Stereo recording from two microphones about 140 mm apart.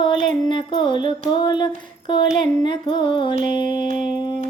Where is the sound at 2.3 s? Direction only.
35° left (ahead or behind).